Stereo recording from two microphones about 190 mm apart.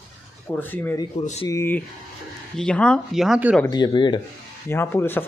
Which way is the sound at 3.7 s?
20° left (ahead or behind).